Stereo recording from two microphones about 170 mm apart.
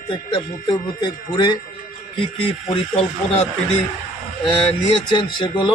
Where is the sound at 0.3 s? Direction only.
25° left (ahead or behind).